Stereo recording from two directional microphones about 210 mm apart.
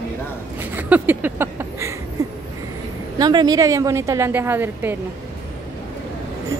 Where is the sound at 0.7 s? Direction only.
10° right (ahead or behind).